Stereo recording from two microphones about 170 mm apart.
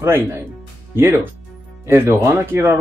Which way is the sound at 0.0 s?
15° right (ahead or behind).